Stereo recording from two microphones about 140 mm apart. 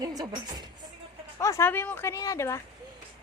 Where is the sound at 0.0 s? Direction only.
25° right (ahead or behind).